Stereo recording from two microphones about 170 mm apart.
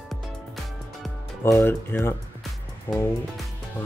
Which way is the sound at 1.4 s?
15° left (ahead or behind).